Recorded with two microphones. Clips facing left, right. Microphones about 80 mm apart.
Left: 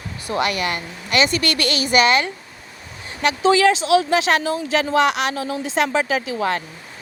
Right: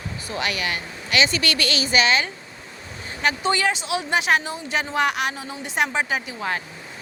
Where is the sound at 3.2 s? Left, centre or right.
Left.